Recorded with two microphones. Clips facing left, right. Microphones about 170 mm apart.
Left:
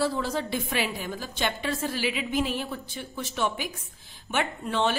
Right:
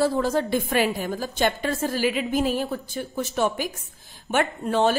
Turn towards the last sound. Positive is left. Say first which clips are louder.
# right 5 dB
turn(degrees=-40)  # may be behind; listen again after turning